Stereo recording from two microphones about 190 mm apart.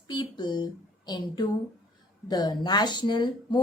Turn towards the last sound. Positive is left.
turn(degrees=25)  # may be behind; listen again after turning